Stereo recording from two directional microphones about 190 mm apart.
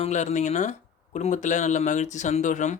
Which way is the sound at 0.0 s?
40° left (ahead or behind).